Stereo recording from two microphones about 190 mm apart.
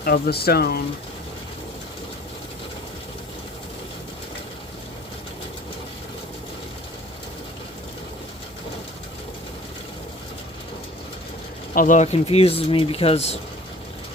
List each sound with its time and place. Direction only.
0.0 s speech: 55° left (ahead or behind)
11.7 s speech: 45° left (ahead or behind)